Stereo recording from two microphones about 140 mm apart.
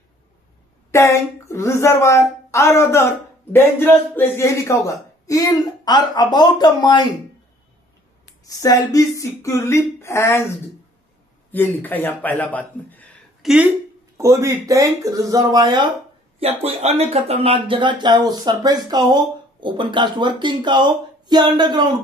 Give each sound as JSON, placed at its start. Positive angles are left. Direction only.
{"t": 0.9, "sound": "a woman's voice", "side_deg": 20}
{"t": 8.5, "sound": "a woman's voice", "side_deg": 25}
{"t": 11.5, "sound": "a man's voice", "side_deg": 15}
{"t": 13.4, "sound": "speech", "side_deg": -5}
{"t": 14.1, "sound": "speech", "side_deg": -20}
{"t": 16.3, "sound": "speech", "side_deg": -45}